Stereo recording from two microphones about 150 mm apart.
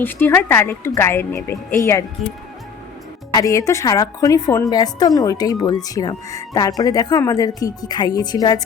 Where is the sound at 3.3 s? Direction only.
20° left (ahead or behind).